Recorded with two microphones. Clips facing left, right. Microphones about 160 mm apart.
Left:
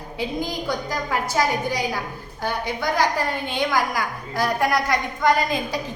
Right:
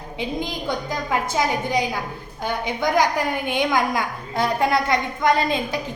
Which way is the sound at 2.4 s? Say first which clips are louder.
Right 2 dB; 20° right (ahead or behind).